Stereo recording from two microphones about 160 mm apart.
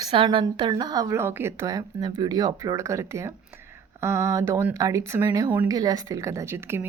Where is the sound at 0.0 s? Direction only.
30° right (ahead or behind).